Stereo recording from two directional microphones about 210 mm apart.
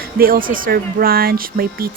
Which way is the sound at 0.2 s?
45° right (ahead or behind).